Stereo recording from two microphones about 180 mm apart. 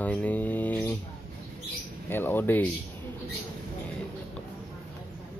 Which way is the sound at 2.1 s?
10° left (ahead or behind).